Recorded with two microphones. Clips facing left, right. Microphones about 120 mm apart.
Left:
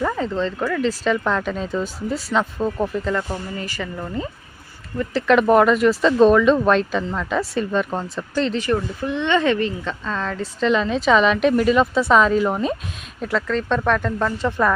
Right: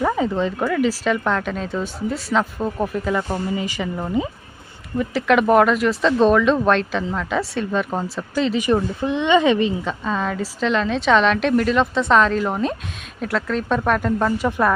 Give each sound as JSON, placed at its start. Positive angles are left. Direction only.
{"t": 0.0, "sound": "speech", "side_deg": -15}
{"t": 4.9, "sound": "speech", "side_deg": -5}
{"t": 8.6, "sound": "speech", "side_deg": -20}